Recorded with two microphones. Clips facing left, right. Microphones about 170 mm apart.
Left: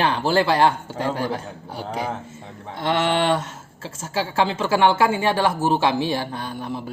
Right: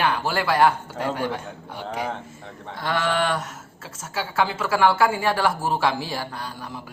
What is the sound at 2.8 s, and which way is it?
Speech, 25° left (ahead or behind).